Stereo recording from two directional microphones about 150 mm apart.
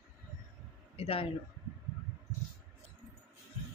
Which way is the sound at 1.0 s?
40° left (ahead or behind).